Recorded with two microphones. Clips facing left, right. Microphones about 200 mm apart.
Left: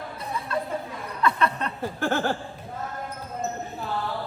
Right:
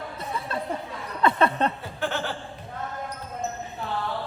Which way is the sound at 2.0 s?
50° left (ahead or behind).